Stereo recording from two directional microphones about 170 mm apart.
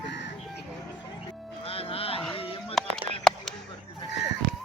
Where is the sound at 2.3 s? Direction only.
30° left (ahead or behind).